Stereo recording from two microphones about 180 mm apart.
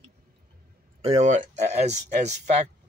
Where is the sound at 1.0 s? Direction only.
40° right (ahead or behind).